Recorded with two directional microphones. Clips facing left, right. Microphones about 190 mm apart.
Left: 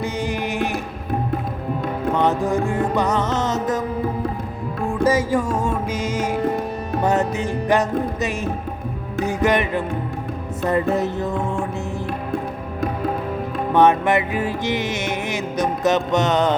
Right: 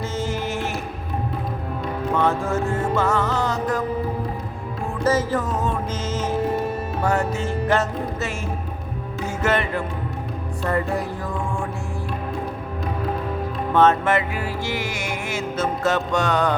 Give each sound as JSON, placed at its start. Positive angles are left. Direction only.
{"t": 0.0, "sound": "music", "side_deg": 15}
{"t": 2.1, "sound": "music", "side_deg": 20}
{"t": 5.0, "sound": "music", "side_deg": 10}
{"t": 7.0, "sound": "speech", "side_deg": 20}
{"t": 10.6, "sound": "music", "side_deg": 20}
{"t": 13.7, "sound": "music", "side_deg": 15}